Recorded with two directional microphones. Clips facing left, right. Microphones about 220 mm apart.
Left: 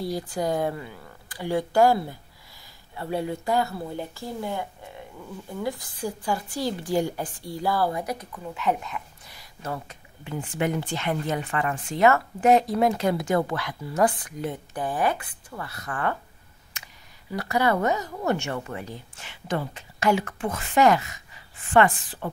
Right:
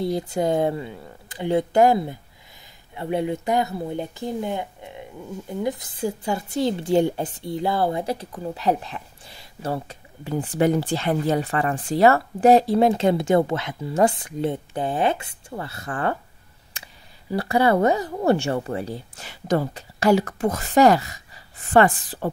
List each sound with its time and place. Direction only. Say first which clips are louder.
0.0 s a woman's voice: right 5 dB; 25° right (ahead or behind)